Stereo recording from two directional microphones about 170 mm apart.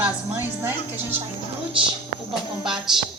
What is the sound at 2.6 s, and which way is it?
Speech, 5° right (ahead or behind).